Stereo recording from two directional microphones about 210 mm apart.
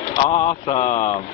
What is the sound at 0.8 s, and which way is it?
Speech, 35° left (ahead or behind).